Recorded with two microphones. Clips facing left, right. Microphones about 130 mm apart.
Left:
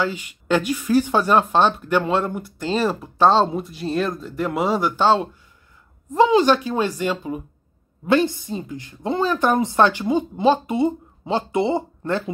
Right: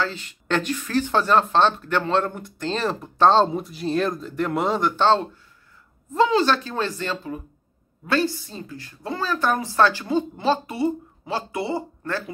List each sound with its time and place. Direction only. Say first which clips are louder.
0.0 s speech: left 3 dB; 10° left (ahead or behind)